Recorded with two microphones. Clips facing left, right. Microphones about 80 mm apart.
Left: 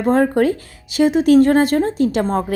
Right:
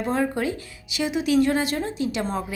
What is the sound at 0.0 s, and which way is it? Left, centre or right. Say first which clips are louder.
A woman's voice: left 9 dB; left.